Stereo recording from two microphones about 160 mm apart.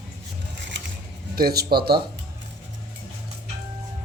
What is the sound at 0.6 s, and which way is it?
Scissors, 90° right.